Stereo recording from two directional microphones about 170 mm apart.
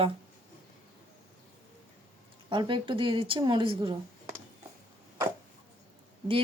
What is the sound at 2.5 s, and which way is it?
A woman's voice, 30° right (ahead or behind).